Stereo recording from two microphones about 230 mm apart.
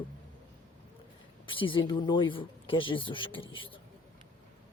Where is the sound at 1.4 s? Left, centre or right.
Left.